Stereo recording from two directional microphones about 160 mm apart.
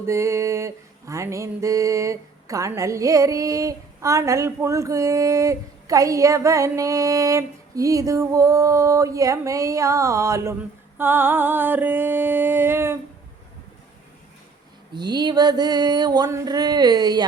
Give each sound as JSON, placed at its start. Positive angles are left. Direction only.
{"t": 0.0, "sound": "music", "side_deg": -15}
{"t": 10.9, "sound": "a sound", "side_deg": -15}
{"t": 14.9, "sound": "music", "side_deg": -25}